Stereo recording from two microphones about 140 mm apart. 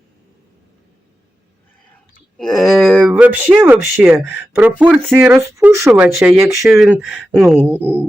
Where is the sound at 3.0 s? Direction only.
10° right (ahead or behind).